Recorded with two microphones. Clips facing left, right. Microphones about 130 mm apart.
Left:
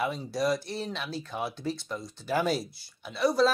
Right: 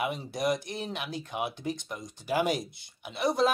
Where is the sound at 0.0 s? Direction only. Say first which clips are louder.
Left 1 dB; 20° right (ahead or behind).